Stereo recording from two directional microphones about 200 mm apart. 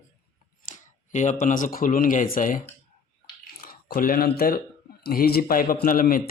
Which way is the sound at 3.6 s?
45° left (ahead or behind).